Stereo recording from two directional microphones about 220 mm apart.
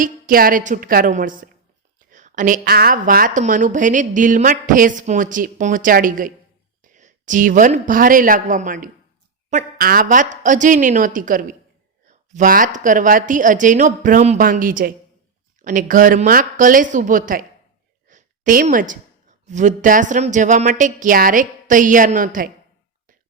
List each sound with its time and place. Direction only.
0.0 s a woman's voice: 40° right (ahead or behind)